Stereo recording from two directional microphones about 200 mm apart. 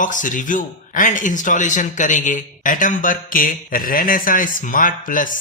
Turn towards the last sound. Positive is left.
turn(degrees=40)  # may be behind; listen again after turning